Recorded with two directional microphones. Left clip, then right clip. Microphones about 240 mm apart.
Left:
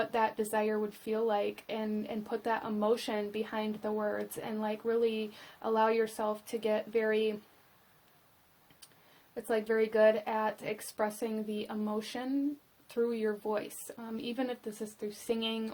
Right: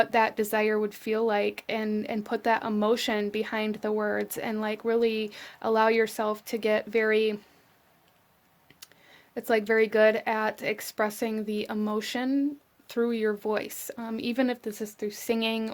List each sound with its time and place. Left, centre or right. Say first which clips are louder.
0.0 s speech: right 7 dB; right
9.3 s speech: right 7 dB; right